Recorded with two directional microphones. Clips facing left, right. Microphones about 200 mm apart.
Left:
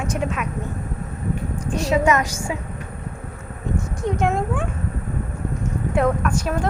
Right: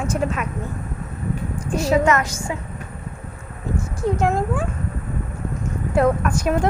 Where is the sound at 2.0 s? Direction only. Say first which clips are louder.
Even; 10° left (ahead or behind).